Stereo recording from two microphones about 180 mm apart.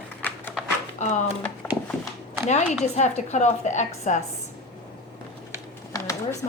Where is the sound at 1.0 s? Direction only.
40° left (ahead or behind).